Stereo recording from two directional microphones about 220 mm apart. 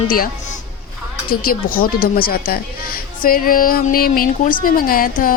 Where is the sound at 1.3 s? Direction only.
40° left (ahead or behind).